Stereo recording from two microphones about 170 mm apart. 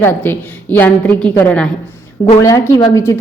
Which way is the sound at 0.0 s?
10° left (ahead or behind).